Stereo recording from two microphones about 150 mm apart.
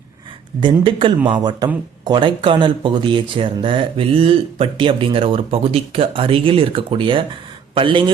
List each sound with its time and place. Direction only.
0.6 s speech: 35° right (ahead or behind)